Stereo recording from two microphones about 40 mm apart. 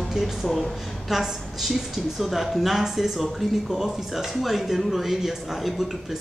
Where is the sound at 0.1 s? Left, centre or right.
Centre.